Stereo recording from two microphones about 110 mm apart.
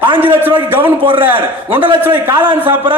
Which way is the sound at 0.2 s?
15° right (ahead or behind).